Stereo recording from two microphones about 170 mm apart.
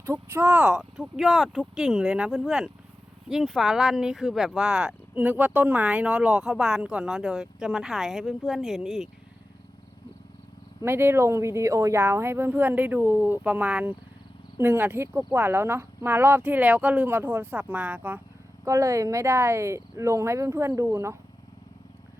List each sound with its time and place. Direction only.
0.0 s speech: 15° right (ahead or behind)
10.8 s speech: 15° right (ahead or behind)